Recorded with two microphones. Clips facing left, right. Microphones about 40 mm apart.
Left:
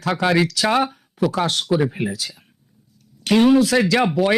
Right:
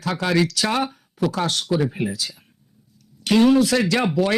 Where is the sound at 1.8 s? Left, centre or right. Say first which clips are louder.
Left 1 dB; centre.